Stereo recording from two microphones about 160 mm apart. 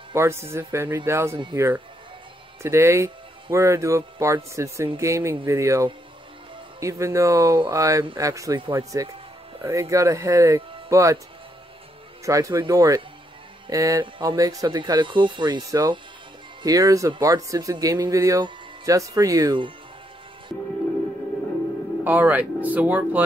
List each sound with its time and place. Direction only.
0.1 s speech: 15° right (ahead or behind)
12.3 s speech: 20° right (ahead or behind)
22.0 s speech: 10° right (ahead or behind)